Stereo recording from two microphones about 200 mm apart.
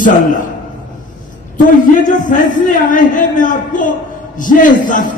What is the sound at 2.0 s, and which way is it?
A man's voice, 40° left (ahead or behind).